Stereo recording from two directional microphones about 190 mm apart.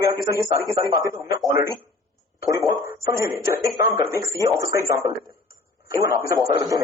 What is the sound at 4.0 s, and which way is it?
A man's voice, 15° right (ahead or behind).